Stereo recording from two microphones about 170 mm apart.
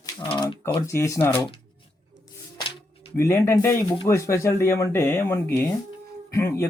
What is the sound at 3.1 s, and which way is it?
Speech, 15° left (ahead or behind).